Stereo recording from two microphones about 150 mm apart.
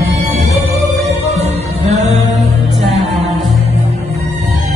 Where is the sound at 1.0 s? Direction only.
45° right (ahead or behind).